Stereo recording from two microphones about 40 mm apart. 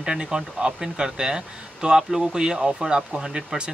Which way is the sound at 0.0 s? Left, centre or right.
Centre.